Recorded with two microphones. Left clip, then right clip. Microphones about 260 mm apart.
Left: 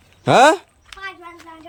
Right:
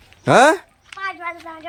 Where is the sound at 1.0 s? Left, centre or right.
Centre.